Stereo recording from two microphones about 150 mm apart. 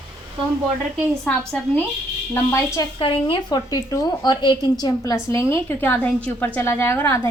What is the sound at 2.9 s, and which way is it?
A woman's voice, 35° left (ahead or behind).